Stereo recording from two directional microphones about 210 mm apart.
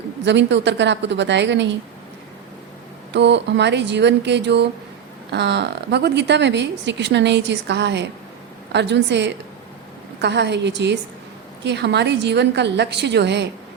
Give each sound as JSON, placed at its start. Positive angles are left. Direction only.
{"t": 0.3, "sound": "a woman's voice", "side_deg": -55}
{"t": 3.1, "sound": "a woman's voice", "side_deg": -55}